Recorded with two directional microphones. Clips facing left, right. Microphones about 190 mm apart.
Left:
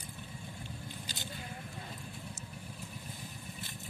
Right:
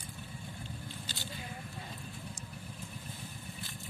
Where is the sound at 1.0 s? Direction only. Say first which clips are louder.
Even; 20° left (ahead or behind).